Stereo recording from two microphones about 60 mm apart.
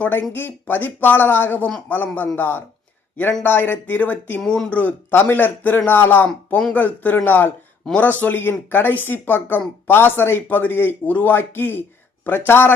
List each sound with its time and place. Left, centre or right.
0.0 s speech: left
4.4 s speech: centre
4.7 s speech: left